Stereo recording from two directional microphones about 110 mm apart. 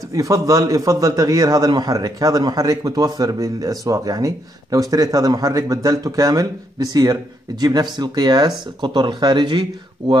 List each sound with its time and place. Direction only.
0.1 s a man's voice: 30° right (ahead or behind); by 10.1 s 45° right (ahead or behind)